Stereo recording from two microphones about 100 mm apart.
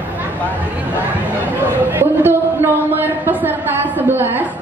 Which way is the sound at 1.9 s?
20° right (ahead or behind).